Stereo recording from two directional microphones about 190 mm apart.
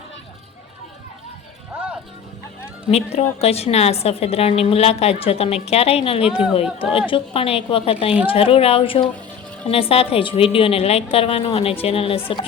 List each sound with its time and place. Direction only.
2.9 s a woman's voice: 35° left (ahead or behind)
6.2 s speech: 5° right (ahead or behind)
6.5 s a woman's voice: 30° left (ahead or behind)